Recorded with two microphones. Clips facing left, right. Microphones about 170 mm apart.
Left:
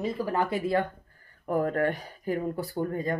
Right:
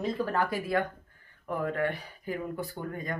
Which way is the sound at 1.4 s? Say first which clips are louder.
Left 4 dB; 40° left (ahead or behind).